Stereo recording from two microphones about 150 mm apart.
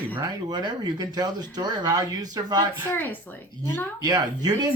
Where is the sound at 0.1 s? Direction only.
25° right (ahead or behind).